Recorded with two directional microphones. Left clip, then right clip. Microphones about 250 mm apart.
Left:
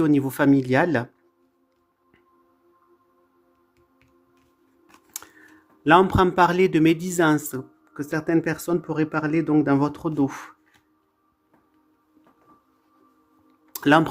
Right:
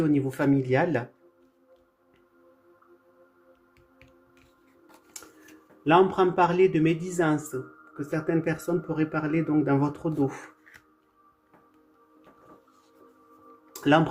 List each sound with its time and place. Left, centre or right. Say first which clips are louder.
0.0 s speech: left 5 dB; left
5.8 s speech: left 4 dB; left
13.7 s speech: left 4 dB; left